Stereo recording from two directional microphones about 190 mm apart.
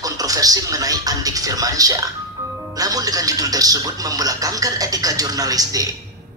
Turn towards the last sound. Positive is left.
turn(degrees=-20)  # may be behind; listen again after turning